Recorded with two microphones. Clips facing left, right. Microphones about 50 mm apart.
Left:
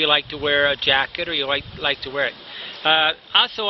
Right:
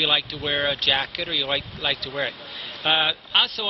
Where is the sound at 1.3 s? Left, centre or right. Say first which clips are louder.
Left 3 dB; centre.